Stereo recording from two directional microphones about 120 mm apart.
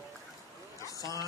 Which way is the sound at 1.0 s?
30° left (ahead or behind).